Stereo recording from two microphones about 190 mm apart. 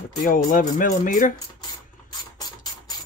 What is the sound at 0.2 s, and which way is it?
Speech, 45° left (ahead or behind).